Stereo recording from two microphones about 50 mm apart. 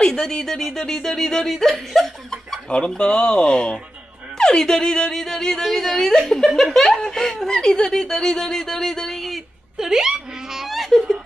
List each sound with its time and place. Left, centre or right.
0.0 s speech: centre
1.9 s chuckle: centre
2.6 s speech: left
5.6 s speech: centre
9.7 s laughter: centre